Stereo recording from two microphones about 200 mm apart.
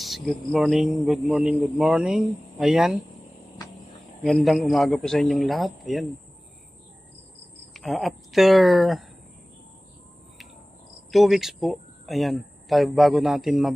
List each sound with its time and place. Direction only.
0.0 s a man's voice: centre (ahead or behind)
4.2 s a man's voice: centre (ahead or behind)
7.7 s a man's voice: centre (ahead or behind)
11.1 s speech: centre (ahead or behind)